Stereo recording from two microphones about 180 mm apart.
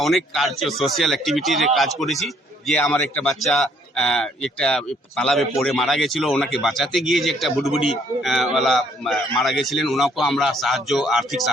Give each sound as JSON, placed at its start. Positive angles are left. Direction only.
{"t": 0.0, "sound": "speech", "side_deg": 0}